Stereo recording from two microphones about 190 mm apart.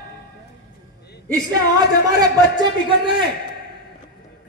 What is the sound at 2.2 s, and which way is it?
Speech, 20° right (ahead or behind).